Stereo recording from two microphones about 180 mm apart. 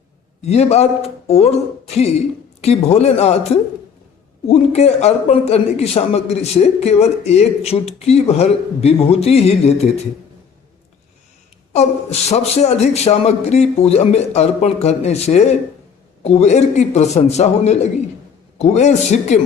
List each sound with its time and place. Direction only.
0.4 s a man's voice: 35° left (ahead or behind)
12.3 s a man's voice: 35° left (ahead or behind)